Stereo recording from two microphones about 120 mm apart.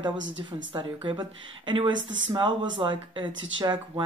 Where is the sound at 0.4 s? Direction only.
45° right (ahead or behind).